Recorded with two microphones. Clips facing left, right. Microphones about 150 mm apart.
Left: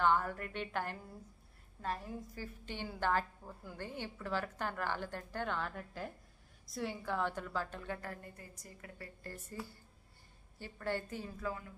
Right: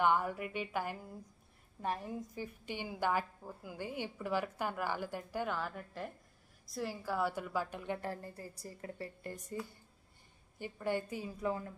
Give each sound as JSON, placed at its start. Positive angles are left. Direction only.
{"t": 0.0, "sound": "a woman's voice", "side_deg": -15}
{"t": 9.3, "sound": "a woman's voice", "side_deg": -15}
{"t": 10.6, "sound": "a woman's voice", "side_deg": -15}